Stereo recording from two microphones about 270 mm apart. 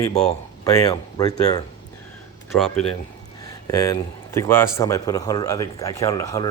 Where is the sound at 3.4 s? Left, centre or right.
Centre.